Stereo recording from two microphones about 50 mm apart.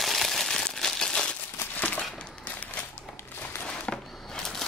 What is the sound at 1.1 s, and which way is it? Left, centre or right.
Crumpling, left.